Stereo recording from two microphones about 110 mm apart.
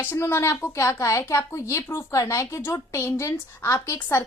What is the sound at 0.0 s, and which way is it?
A woman's voice, 20° left (ahead or behind).